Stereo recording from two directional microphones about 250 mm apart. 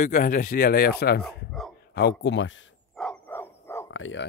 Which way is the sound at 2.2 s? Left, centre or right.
Left.